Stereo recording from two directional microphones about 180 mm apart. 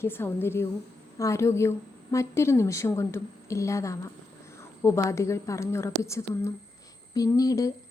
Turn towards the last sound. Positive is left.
turn(degrees=20)  # may be behind; listen again after turning